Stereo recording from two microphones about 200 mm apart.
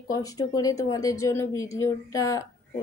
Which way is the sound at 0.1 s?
15° left (ahead or behind).